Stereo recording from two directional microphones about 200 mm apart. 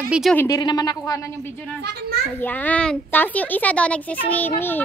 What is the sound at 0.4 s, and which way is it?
Speech, 20° left (ahead or behind).